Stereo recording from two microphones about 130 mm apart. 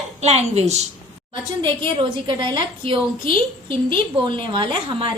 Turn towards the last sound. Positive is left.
turn(degrees=-40)  # may be behind; listen again after turning